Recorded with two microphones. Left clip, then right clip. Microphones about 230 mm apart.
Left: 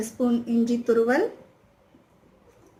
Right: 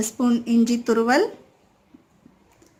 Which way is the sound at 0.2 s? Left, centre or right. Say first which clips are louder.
Right 3 dB; right.